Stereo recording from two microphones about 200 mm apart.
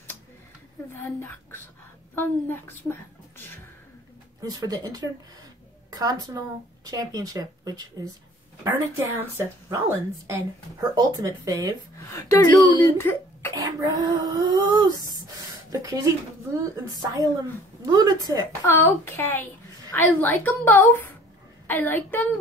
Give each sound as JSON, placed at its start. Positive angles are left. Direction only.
{"t": 2.1, "sound": "speech", "side_deg": 10}
{"t": 4.4, "sound": "a woman's voice", "side_deg": -20}
{"t": 12.2, "sound": "speech", "side_deg": 15}
{"t": 13.6, "sound": "a woman's voice", "side_deg": -20}
{"t": 18.7, "sound": "speech", "side_deg": 10}